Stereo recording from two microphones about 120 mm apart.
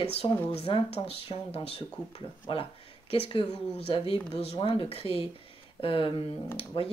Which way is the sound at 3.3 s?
50° left (ahead or behind).